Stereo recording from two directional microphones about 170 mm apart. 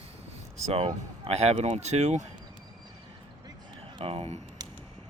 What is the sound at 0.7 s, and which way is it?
Speech, 35° right (ahead or behind).